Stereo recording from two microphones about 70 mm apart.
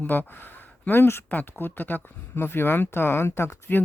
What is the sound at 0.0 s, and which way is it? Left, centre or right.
Speech, left.